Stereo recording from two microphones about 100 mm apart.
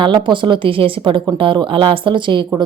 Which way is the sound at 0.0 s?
55° right (ahead or behind).